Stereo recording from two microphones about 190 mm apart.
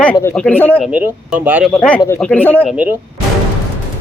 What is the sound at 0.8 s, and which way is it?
Speech, 10° right (ahead or behind).